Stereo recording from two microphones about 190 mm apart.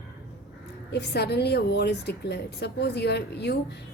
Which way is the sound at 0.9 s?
60° left (ahead or behind).